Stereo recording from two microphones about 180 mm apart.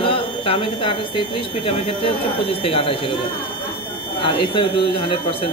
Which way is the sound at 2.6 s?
30° left (ahead or behind).